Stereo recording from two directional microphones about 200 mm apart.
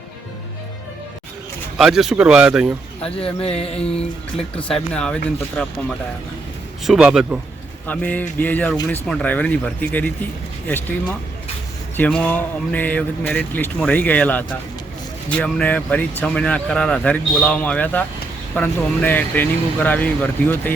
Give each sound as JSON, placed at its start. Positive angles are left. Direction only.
{"t": 1.8, "sound": "speech", "side_deg": 0}
{"t": 3.2, "sound": "speech", "side_deg": 30}
{"t": 4.5, "sound": "speech", "side_deg": 5}
{"t": 6.8, "sound": "speech", "side_deg": -5}
{"t": 7.9, "sound": "speech", "side_deg": 10}
{"t": 11.9, "sound": "speech", "side_deg": 5}